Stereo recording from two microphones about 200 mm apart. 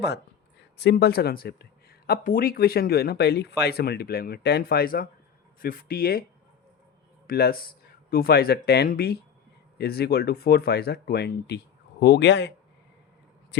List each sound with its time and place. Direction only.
0.8 s speech: 55° left (ahead or behind)
7.3 s speech: 50° left (ahead or behind)